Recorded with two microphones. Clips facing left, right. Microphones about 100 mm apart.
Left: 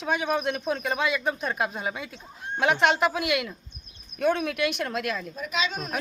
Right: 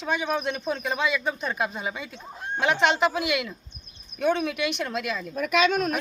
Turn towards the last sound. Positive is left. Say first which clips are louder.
# right 8 dB
turn(degrees=-55)  # may be behind; listen again after turning